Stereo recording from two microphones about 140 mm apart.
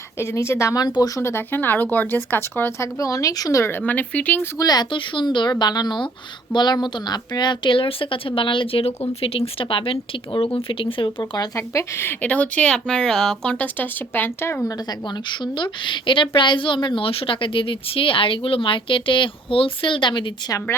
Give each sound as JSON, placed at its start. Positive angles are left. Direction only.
{"t": 0.2, "sound": "speech", "side_deg": 20}
{"t": 4.5, "sound": "speech", "side_deg": 30}
{"t": 14.8, "sound": "speech", "side_deg": 35}